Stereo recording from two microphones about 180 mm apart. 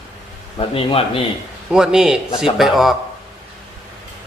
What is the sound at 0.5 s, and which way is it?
Speech, 30° left (ahead or behind).